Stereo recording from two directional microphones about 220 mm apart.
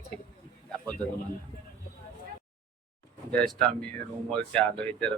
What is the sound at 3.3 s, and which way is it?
Speech, centre (ahead or behind).